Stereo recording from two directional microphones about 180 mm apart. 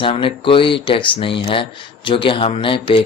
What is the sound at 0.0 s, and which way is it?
Speech, 30° left (ahead or behind).